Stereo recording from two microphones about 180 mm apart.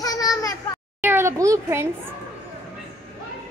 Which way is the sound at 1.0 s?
10° right (ahead or behind).